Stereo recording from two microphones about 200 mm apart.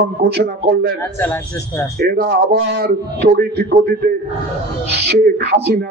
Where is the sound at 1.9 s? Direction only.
50° right (ahead or behind).